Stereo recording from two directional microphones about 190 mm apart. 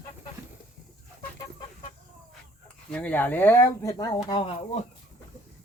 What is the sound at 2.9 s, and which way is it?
A woman's voice, 5° left (ahead or behind).